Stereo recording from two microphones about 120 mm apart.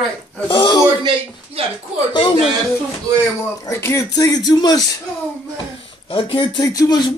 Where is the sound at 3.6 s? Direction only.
25° left (ahead or behind).